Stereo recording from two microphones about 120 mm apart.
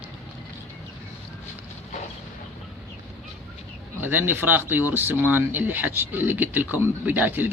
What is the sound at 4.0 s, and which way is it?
Speech, 15° right (ahead or behind).